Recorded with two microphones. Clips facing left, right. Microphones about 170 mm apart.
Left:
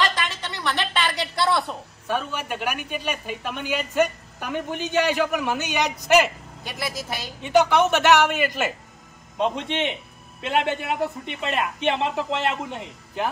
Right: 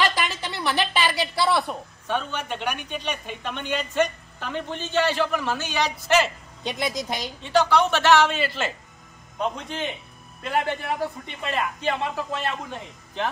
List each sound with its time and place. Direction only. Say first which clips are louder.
0.4 s a woman's voice: right 2 dB; 5° right (ahead or behind)
2.0 s a woman's voice: left 1 dB; 5° left (ahead or behind)
6.6 s a woman's voice: right 4 dB; 20° right (ahead or behind)
7.4 s a woman's voice: left 2 dB; 20° left (ahead or behind)
9.4 s a woman's voice: left 4 dB; 25° left (ahead or behind)